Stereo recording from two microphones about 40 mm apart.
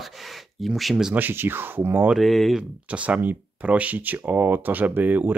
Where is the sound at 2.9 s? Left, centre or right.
Right.